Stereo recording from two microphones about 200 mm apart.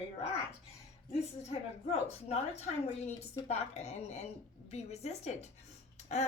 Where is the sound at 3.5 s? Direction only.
35° left (ahead or behind).